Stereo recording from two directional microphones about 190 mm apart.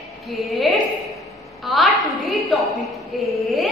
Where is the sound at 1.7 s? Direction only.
Centre (ahead or behind).